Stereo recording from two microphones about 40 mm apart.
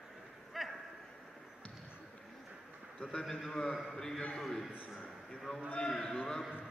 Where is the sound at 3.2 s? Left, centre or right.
Centre.